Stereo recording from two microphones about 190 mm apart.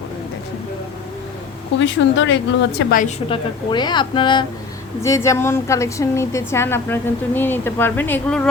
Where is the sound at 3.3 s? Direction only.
25° left (ahead or behind).